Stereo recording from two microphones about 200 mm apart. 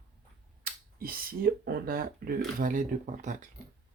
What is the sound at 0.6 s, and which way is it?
Speech, 45° right (ahead or behind).